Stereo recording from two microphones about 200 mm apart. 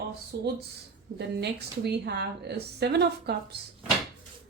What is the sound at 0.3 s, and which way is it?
A woman's voice, 55° right (ahead or behind).